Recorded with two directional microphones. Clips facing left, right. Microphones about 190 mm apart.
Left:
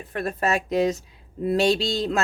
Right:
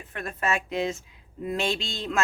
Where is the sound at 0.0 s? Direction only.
40° left (ahead or behind).